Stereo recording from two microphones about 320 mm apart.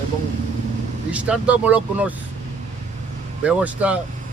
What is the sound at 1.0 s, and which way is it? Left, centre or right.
Speech, centre.